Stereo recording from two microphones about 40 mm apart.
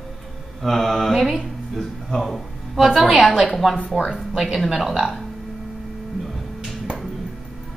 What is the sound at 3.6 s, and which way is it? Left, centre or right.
Mantra, centre.